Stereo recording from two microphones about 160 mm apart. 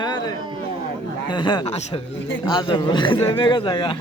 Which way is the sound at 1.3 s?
30° left (ahead or behind).